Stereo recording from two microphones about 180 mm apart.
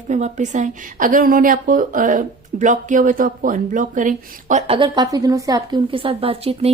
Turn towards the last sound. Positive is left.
turn(degrees=-35)  # may be behind; listen again after turning